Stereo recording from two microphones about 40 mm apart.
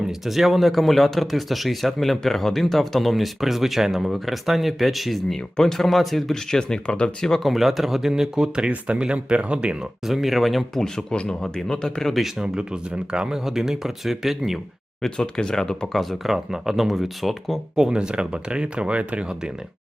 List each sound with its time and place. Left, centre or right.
0.1 s speech: centre
5.5 s speech: centre
5.8 s speech: centre; by 7.3 s left
7.4 s speech: centre
9.0 s speech: right
10.1 s speech: centre
10.8 s speech: centre
12.4 s speech: right
13.4 s speech: centre
15.0 s speech: centre
15.9 s speech: centre
16.2 s speech: centre
17.7 s speech: right